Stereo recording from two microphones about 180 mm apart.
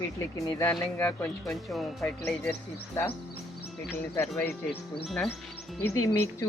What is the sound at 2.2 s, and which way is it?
Speech, 15° left (ahead or behind).